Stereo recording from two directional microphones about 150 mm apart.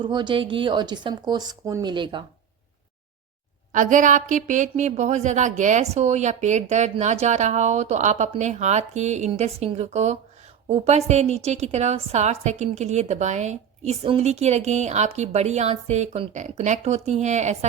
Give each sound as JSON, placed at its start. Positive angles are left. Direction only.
{"t": 0.0, "sound": "speech", "side_deg": -30}
{"t": 3.7, "sound": "a woman's voice", "side_deg": -60}
{"t": 14.0, "sound": "a woman's voice", "side_deg": -40}